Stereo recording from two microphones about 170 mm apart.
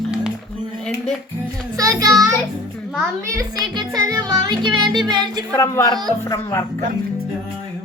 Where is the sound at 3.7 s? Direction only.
25° right (ahead or behind).